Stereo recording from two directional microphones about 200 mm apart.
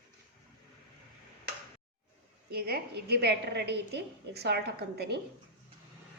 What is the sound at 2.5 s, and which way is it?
A woman's voice, 50° right (ahead or behind).